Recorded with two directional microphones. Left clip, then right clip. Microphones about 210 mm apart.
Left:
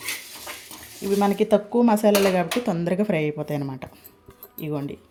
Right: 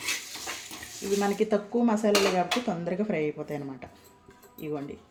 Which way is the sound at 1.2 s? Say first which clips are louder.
Left 7 dB; 50° left (ahead or behind).